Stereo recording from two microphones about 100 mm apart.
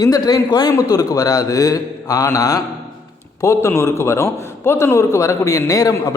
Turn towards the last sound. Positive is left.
turn(degrees=35)  # may be behind; listen again after turning